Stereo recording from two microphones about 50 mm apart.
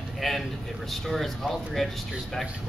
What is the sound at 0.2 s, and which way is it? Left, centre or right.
A man's voice, centre.